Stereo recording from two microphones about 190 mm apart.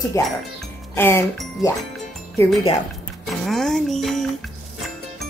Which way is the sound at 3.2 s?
Centre (ahead or behind).